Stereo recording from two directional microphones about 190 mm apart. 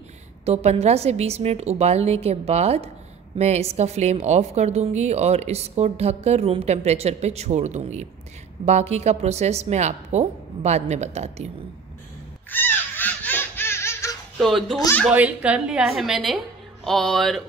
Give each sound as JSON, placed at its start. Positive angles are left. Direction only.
{"t": 0.5, "sound": "a woman's voice", "side_deg": -35}
{"t": 12.4, "sound": "a sound", "side_deg": 10}
{"t": 14.4, "sound": "a woman's voice", "side_deg": 0}
{"t": 14.8, "sound": "speech", "side_deg": 15}
{"t": 15.0, "sound": "a woman's voice", "side_deg": -5}